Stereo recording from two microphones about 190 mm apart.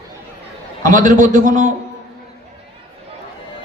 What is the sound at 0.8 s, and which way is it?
Speech, 45° right (ahead or behind).